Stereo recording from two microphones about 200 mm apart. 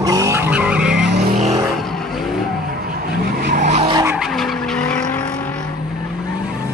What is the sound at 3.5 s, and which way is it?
Vehicle, 30° right (ahead or behind).